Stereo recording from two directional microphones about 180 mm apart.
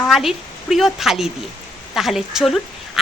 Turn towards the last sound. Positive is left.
turn(degrees=0)  # may be behind; listen again after turning